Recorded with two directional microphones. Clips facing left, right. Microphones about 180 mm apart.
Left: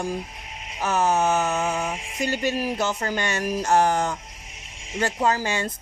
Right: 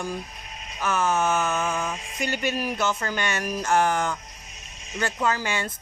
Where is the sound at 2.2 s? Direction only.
35° left (ahead or behind).